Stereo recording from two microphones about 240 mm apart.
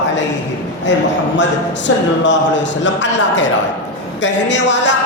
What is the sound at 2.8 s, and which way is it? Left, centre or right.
Speech, left.